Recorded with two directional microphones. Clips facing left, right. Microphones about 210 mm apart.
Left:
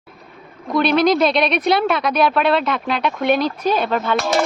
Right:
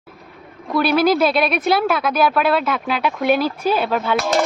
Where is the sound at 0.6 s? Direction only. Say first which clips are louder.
Left 1 dB; 5° right (ahead or behind).